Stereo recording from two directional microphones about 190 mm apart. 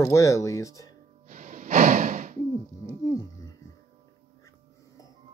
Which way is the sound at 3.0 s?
20° left (ahead or behind).